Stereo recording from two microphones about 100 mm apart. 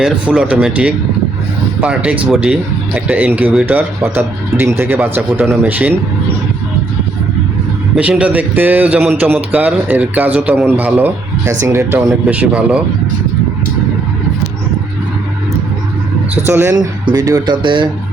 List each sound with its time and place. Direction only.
0.0 s a man's voice: 10° right (ahead or behind)
7.9 s a man's voice: 10° right (ahead or behind)
11.4 s speech: 30° right (ahead or behind)
12.2 s a man's voice: 15° right (ahead or behind)
16.3 s speech: 20° right (ahead or behind)
16.7 s speech: 40° right (ahead or behind)
17.4 s speech: 55° right (ahead or behind)